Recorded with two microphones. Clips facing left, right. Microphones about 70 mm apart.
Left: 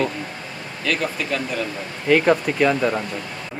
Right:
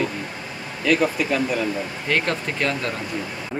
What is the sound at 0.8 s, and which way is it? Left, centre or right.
Speech, centre.